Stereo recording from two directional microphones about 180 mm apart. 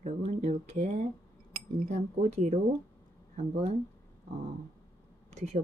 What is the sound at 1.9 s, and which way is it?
Speech, 40° right (ahead or behind).